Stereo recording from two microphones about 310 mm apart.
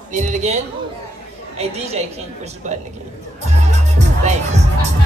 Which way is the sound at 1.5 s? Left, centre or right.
Right.